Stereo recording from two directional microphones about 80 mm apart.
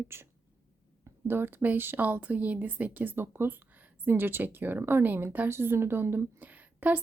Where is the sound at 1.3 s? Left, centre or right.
Right.